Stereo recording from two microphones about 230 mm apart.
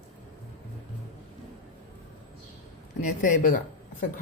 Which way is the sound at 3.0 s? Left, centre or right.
Left.